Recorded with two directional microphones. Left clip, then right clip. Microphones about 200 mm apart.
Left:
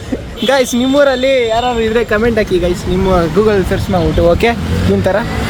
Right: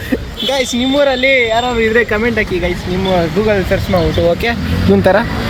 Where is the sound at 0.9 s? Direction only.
20° left (ahead or behind).